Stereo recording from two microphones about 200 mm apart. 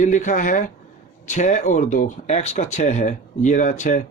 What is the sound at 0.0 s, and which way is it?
Speech, 40° left (ahead or behind).